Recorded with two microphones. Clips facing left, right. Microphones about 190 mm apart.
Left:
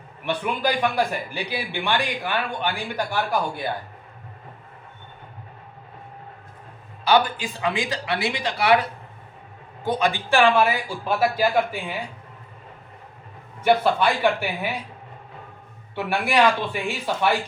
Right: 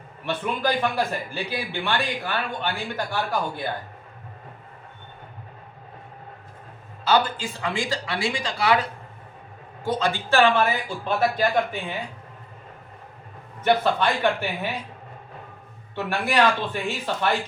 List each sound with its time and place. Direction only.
0.3 s speech: 10° left (ahead or behind)
7.1 s speech: 15° left (ahead or behind)
13.7 s speech: 10° left (ahead or behind)
16.0 s speech: 10° left (ahead or behind)